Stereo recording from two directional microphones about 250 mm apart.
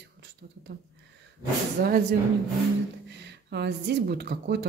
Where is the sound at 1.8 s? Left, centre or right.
Right.